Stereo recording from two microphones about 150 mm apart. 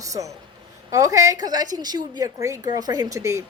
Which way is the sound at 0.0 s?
20° right (ahead or behind).